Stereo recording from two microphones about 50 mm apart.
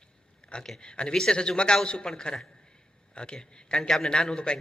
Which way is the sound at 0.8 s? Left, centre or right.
Centre.